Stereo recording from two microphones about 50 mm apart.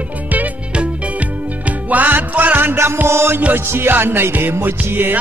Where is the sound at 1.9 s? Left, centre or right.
Right.